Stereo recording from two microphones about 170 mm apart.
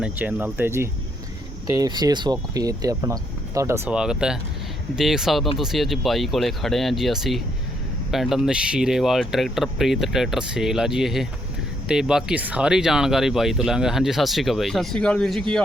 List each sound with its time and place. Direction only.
0.0 s speech: 10° right (ahead or behind)